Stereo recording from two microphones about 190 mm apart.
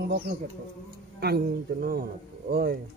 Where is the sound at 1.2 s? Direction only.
55° right (ahead or behind).